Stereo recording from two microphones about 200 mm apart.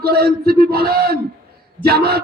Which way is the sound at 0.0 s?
50° right (ahead or behind).